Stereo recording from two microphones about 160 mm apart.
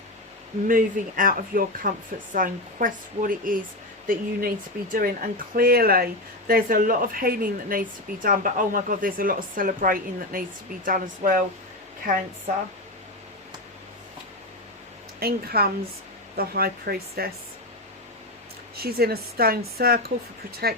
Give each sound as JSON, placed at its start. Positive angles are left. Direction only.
{"t": 0.7, "sound": "speech", "side_deg": -60}
{"t": 15.2, "sound": "speech", "side_deg": -75}
{"t": 18.8, "sound": "speech", "side_deg": -75}